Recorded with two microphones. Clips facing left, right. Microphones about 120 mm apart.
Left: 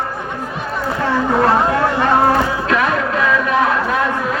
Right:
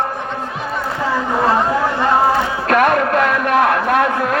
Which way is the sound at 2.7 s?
55° right (ahead or behind).